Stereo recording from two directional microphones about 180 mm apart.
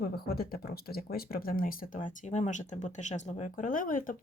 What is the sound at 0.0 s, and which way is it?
Speech, 55° left (ahead or behind).